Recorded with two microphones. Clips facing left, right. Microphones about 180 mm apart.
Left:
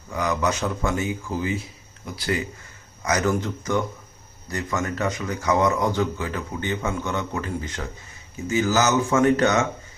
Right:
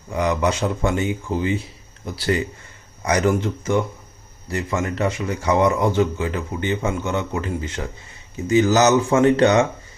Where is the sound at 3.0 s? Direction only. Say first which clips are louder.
Right 4 dB; 30° right (ahead or behind).